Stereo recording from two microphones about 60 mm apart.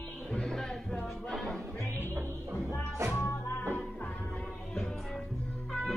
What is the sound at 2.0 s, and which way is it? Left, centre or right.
Music, right.